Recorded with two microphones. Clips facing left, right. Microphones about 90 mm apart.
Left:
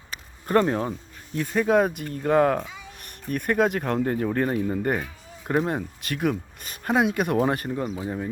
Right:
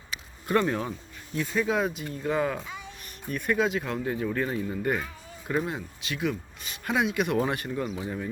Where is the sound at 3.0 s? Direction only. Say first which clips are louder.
Left 1 dB; 55° left (ahead or behind).